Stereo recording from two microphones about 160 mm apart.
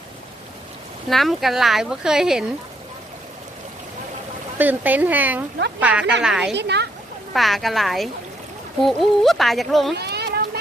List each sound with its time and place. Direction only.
1.1 s speech: centre (ahead or behind)
4.5 s speech: 10° right (ahead or behind)
6.5 s speech: 90° right
7.3 s speech: centre (ahead or behind)
9.9 s a sound: 90° right